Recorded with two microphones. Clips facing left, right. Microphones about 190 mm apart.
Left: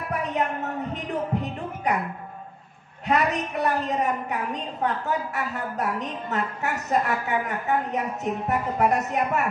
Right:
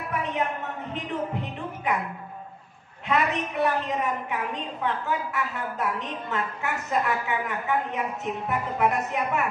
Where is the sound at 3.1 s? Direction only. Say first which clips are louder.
Left 2 dB; 40° left (ahead or behind).